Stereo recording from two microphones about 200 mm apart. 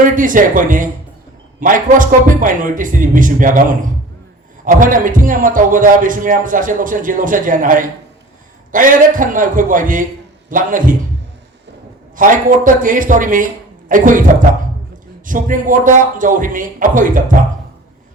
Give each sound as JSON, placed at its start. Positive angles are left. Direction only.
{"t": 0.0, "sound": "a man's voice", "side_deg": -40}
{"t": 12.1, "sound": "a man's voice", "side_deg": -40}